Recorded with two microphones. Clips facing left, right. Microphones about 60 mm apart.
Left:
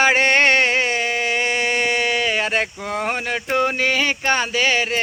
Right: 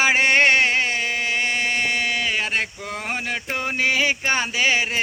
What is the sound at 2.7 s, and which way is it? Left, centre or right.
Speech, centre.